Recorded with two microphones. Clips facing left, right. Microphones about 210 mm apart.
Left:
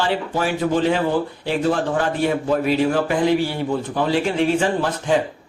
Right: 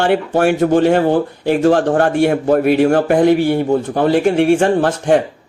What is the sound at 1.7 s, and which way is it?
A man's voice, 75° right (ahead or behind).